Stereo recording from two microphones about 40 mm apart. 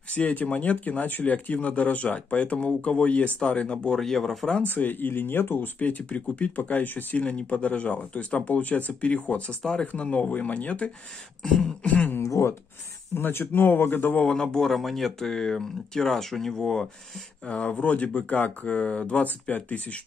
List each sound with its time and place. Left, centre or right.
0.2 s speech: left
3.9 s speech: centre
4.6 s speech: left
5.8 s speech: left
7.2 s speech: left
9.6 s speech: centre
9.9 s speech: left
13.1 s speech: left
13.6 s speech: left
14.2 s speech: centre
14.7 s speech: centre
17.5 s speech: left